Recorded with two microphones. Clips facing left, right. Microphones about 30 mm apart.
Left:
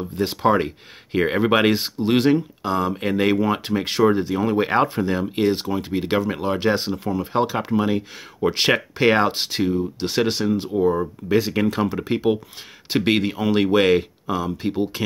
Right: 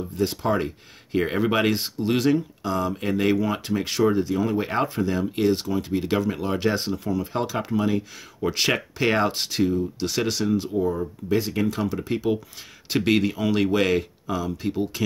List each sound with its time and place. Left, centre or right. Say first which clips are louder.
0.0 s speech: left 4 dB; left
0.7 s speech: left 1 dB; left
6.6 s speech: left 3 dB; left
6.9 s speech: left 2 dB; left
12.9 s speech: left 1 dB; left